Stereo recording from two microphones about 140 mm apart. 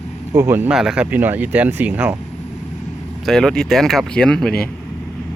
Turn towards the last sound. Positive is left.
turn(degrees=5)  # may be behind; listen again after turning